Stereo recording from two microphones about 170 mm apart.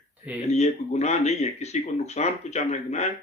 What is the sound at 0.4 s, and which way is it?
Speech, 40° left (ahead or behind).